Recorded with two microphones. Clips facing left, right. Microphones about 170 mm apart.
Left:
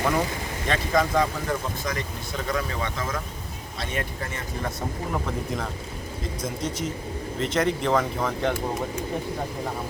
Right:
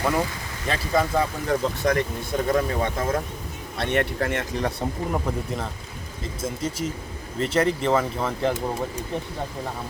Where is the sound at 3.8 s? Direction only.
65° right (ahead or behind).